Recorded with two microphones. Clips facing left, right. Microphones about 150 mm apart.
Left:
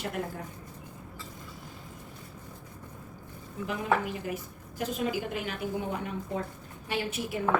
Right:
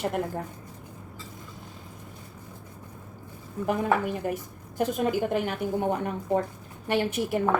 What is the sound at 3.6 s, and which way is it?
A woman's voice, 50° right (ahead or behind).